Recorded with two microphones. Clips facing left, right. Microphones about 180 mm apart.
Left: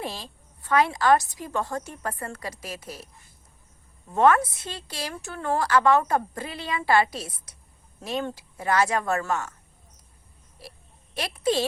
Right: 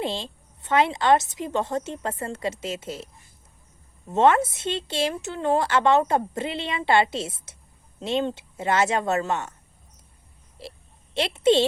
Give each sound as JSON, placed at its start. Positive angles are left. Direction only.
{"t": 0.0, "sound": "speech", "side_deg": -25}
{"t": 4.1, "sound": "speech", "side_deg": -25}
{"t": 10.6, "sound": "a woman's voice", "side_deg": -25}